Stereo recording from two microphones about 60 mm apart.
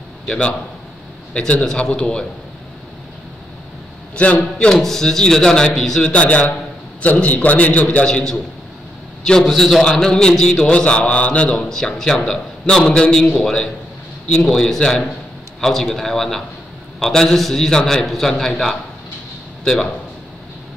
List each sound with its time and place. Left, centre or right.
0.3 s mantra: centre
4.2 s mantra: left
6.0 s a man's voice: left
8.1 s mantra: centre
9.5 s mantra: centre
11.7 s mantra: centre
15.6 s a man's voice: centre
17.0 s mantra: centre
19.6 s a man's voice: centre